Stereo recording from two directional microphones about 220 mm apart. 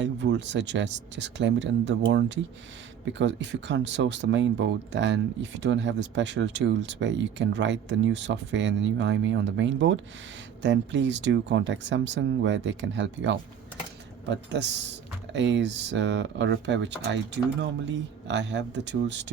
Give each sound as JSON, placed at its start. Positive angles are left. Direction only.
{"t": 0.0, "sound": "speech", "side_deg": -55}